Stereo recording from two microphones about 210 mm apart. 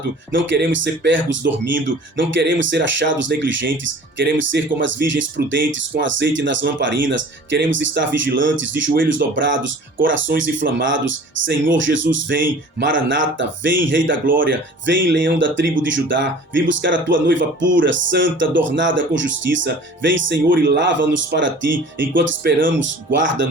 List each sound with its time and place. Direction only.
0.3 s speech: 55° right (ahead or behind)